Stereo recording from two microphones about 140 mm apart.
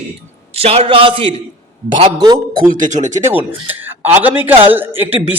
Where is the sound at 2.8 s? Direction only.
60° right (ahead or behind).